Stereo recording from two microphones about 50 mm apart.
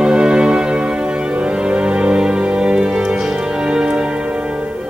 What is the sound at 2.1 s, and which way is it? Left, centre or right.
Music, centre.